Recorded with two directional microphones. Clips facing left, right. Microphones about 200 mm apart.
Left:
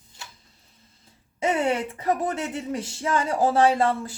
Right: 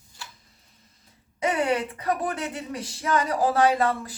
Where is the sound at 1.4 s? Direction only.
25° left (ahead or behind).